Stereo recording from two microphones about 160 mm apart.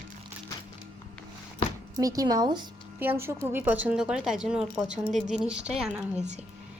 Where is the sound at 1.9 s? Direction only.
25° right (ahead or behind).